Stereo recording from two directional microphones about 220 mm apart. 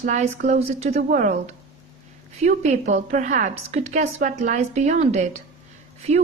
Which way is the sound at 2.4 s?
30° right (ahead or behind).